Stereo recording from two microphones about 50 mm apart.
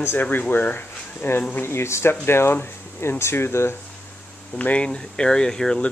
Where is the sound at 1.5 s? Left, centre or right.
Left.